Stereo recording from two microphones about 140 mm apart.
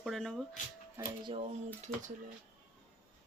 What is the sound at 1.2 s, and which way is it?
Speech, 40° right (ahead or behind).